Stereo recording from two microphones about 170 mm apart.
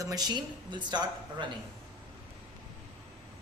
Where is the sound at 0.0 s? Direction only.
25° right (ahead or behind).